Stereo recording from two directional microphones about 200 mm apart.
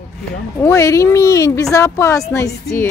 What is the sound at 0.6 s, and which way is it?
Speech, 15° left (ahead or behind).